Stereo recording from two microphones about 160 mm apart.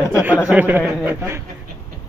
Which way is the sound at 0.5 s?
10° right (ahead or behind).